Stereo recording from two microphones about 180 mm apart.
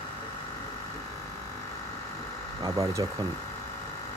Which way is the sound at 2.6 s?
20° right (ahead or behind).